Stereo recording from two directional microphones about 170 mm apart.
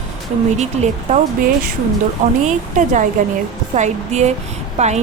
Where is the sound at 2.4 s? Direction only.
45° right (ahead or behind).